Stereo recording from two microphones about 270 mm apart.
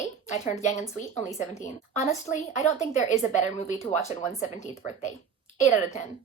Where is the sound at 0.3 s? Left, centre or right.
Left.